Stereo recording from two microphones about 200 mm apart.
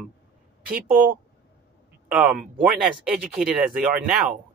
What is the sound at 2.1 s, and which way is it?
Speech, 5° right (ahead or behind).